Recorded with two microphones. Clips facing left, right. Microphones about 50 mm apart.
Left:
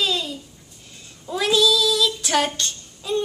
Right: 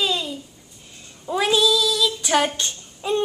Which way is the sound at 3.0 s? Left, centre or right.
Right.